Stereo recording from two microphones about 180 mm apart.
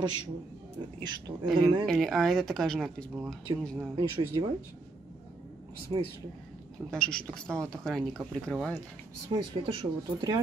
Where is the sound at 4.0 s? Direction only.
25° right (ahead or behind).